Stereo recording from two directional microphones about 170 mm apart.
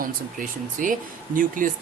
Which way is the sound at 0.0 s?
50° right (ahead or behind).